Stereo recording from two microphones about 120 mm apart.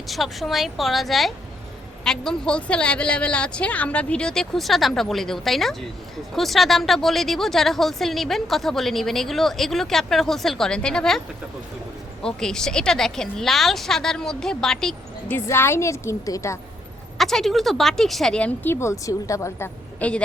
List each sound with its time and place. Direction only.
0.1 s a woman's voice: centre (ahead or behind)
12.2 s a woman's voice: 5° left (ahead or behind)
15.4 s a woman's voice: 20° left (ahead or behind)
17.2 s a woman's voice: 5° left (ahead or behind)